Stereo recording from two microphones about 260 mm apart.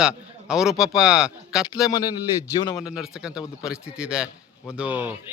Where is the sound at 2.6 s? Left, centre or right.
Centre.